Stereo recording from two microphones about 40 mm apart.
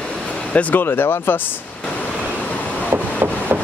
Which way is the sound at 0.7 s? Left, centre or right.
Left.